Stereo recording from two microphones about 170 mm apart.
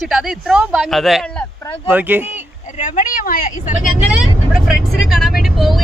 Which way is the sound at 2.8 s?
55° left (ahead or behind).